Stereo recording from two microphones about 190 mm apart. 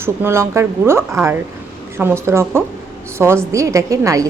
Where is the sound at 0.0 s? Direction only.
10° right (ahead or behind).